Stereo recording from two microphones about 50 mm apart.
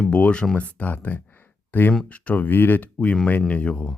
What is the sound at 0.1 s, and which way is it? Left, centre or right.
Speech, left.